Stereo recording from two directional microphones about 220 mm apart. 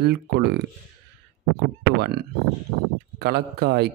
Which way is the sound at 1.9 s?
45° right (ahead or behind).